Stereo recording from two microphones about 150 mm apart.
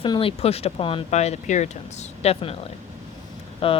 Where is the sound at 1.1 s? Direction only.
50° left (ahead or behind).